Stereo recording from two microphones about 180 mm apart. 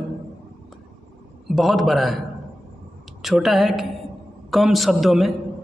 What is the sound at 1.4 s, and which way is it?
Speech, centre (ahead or behind).